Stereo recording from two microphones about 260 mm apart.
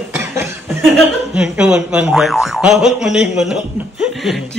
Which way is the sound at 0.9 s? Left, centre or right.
Centre.